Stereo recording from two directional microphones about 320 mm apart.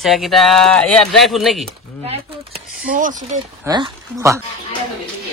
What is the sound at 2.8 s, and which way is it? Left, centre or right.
Speech, right.